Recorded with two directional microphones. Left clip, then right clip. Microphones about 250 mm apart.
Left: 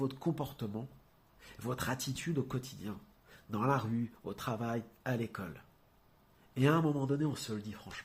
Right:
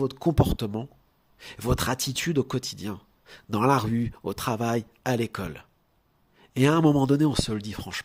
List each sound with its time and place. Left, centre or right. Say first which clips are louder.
0.0 s speech: right 12 dB; right